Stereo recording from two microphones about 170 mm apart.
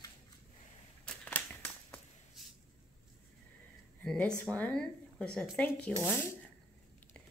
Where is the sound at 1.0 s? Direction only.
10° left (ahead or behind).